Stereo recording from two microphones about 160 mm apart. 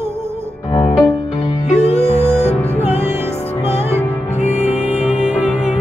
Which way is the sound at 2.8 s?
15° right (ahead or behind).